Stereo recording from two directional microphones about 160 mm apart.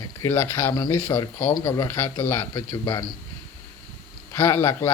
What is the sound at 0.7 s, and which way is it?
A man's voice, 25° left (ahead or behind).